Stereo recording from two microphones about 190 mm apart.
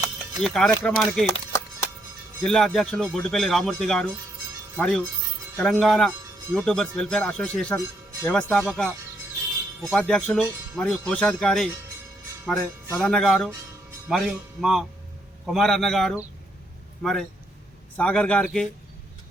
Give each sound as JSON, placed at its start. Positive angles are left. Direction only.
{"t": 0.4, "sound": "a man's voice", "side_deg": 0}
{"t": 0.7, "sound": "speech", "side_deg": 15}
{"t": 1.3, "sound": "a sound", "side_deg": 15}
{"t": 2.4, "sound": "a man's voice", "side_deg": 0}
{"t": 9.9, "sound": "a man's voice", "side_deg": 5}